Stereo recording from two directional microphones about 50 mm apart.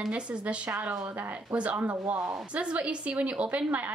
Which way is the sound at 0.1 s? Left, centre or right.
Right.